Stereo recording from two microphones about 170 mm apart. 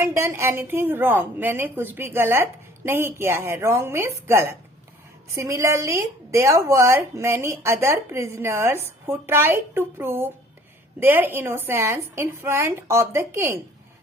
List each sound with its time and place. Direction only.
0.0 s a woman's voice: 15° right (ahead or behind)